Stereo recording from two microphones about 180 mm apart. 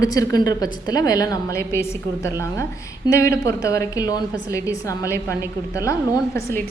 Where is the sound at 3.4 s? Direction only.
15° left (ahead or behind).